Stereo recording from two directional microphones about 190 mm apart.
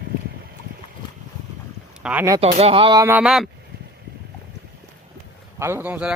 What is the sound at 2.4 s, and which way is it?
Speech, 30° right (ahead or behind).